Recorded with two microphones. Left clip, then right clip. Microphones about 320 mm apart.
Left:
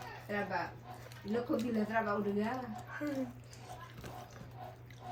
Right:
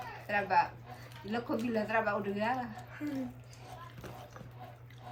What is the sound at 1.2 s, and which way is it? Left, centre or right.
Speech, centre.